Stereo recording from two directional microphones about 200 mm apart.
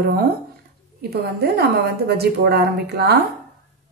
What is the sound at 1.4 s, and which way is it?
A woman's voice, 55° right (ahead or behind).